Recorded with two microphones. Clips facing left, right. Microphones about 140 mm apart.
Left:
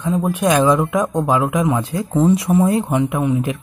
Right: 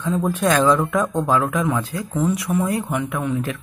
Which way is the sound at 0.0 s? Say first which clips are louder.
Left 2 dB; 15° left (ahead or behind).